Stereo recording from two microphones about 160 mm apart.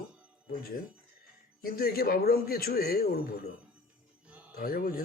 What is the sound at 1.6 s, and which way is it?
Speech, 70° left (ahead or behind).